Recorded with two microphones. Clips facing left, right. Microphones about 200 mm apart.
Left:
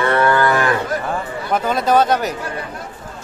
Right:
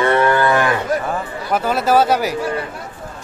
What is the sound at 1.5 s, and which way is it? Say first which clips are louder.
Speech: even; 5° right (ahead or behind).